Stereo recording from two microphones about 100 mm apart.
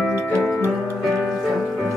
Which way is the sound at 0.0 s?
10° left (ahead or behind).